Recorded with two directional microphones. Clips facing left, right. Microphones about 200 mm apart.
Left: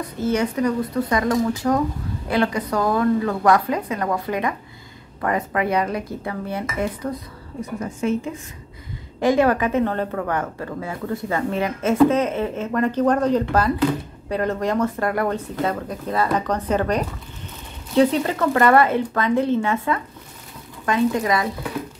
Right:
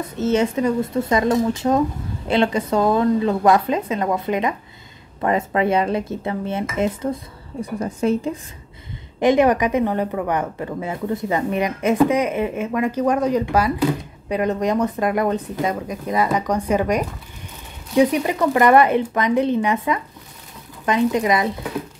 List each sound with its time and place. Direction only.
0.0 s a woman's voice: 25° right (ahead or behind)
7.8 s a woman's voice: 35° right (ahead or behind)
9.2 s a woman's voice: 20° right (ahead or behind)